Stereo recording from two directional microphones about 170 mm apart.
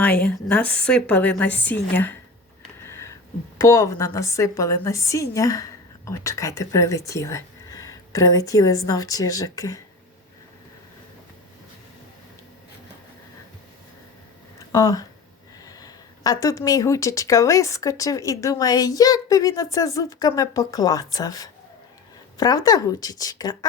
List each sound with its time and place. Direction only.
0.0 s a woman's voice: 5° left (ahead or behind)
2.8 s a sound: 15° left (ahead or behind)
3.6 s speech: 15° left (ahead or behind)
14.7 s speech: 20° left (ahead or behind)